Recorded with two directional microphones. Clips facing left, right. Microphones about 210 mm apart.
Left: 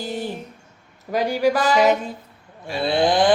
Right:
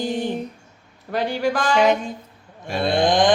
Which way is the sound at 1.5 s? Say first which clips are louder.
Left 1 dB; 5° left (ahead or behind).